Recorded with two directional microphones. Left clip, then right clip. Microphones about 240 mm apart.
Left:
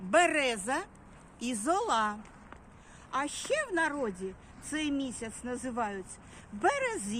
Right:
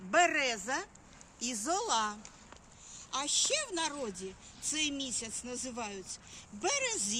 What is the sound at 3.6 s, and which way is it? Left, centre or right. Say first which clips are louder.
Speech: left 5 dB; left.